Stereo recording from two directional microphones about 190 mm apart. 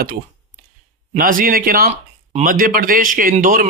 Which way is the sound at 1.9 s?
35° right (ahead or behind).